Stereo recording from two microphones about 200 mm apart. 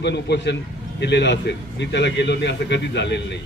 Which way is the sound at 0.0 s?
60° left (ahead or behind).